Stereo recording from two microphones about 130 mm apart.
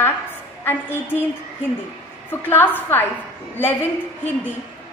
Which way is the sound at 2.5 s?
15° left (ahead or behind).